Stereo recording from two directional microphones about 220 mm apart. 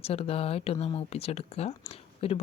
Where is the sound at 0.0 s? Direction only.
25° left (ahead or behind).